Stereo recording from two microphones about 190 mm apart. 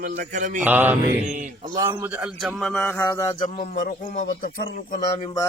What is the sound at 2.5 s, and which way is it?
Speech, 5° left (ahead or behind).